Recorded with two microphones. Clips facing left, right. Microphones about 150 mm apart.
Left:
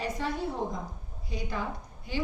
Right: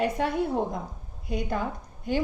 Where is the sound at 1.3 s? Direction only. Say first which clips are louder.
Right 7 dB; 50° right (ahead or behind).